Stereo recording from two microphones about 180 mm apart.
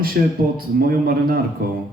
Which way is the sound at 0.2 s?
60° right (ahead or behind).